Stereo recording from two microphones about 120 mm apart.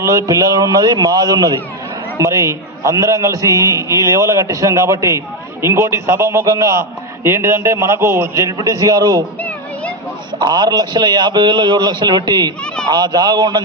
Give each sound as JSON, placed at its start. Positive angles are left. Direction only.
{"t": 0.0, "sound": "a man's voice", "side_deg": -25}
{"t": 10.4, "sound": "a man's voice", "side_deg": -35}